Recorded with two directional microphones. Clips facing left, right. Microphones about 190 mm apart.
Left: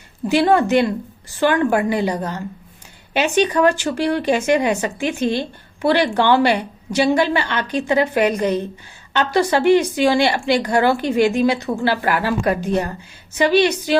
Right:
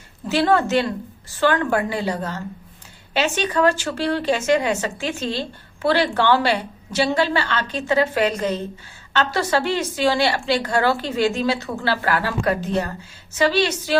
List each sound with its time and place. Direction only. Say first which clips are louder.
0.3 s a woman's voice: left 3 dB; 15° left (ahead or behind)